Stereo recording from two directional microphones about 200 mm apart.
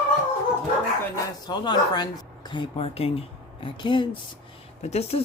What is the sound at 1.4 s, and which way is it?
Speech, 20° left (ahead or behind).